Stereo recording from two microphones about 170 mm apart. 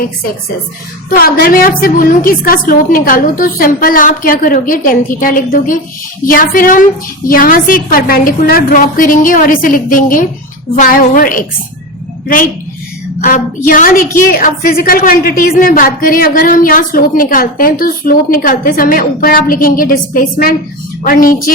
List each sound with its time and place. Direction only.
1.2 s a woman's voice: 60° left (ahead or behind)
13.2 s a woman's voice: 50° left (ahead or behind)